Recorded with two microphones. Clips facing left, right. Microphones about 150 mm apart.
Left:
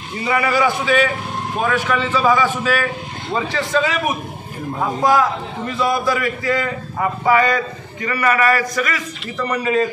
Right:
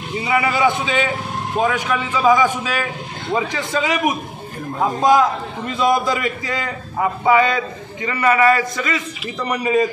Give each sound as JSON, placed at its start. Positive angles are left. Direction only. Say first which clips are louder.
{"t": 0.2, "sound": "a man's voice", "louder": "even", "side_deg": -20}
{"t": 5.8, "sound": "a man's voice", "louder": "right 1 dB", "side_deg": -20}